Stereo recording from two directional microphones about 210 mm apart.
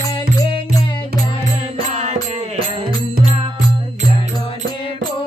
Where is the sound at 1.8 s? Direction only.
35° right (ahead or behind).